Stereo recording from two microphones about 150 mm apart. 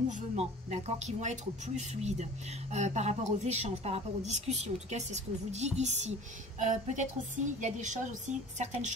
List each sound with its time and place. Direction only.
0.1 s a woman's voice: 45° right (ahead or behind)